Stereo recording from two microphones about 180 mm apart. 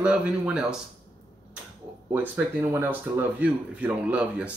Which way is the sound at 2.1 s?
10° right (ahead or behind).